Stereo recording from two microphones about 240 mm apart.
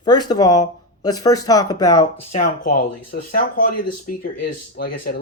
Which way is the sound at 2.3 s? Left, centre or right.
Left.